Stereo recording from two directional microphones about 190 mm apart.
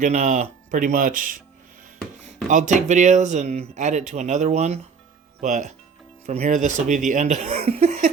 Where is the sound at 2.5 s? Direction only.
40° right (ahead or behind).